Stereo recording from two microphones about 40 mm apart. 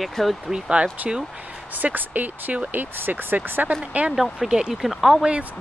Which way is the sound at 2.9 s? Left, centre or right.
Right.